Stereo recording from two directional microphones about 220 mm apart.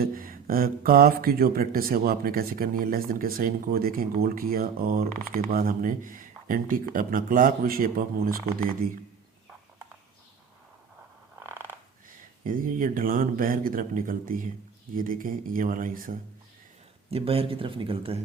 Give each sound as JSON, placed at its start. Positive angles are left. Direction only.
{"t": 0.0, "sound": "speech", "side_deg": -40}
{"t": 11.3, "sound": "a sound", "side_deg": -10}
{"t": 12.5, "sound": "speech", "side_deg": -40}
{"t": 17.1, "sound": "speech", "side_deg": -25}